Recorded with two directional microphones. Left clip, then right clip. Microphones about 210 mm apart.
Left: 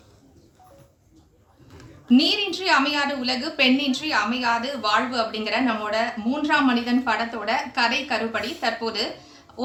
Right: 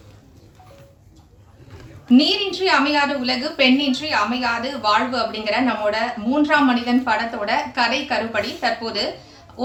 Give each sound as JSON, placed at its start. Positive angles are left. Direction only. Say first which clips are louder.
{"t": 2.0, "sound": "a woman's voice", "louder": "right 3 dB", "side_deg": 55}